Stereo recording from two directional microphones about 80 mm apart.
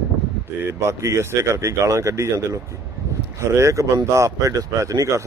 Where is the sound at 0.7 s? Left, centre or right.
Right.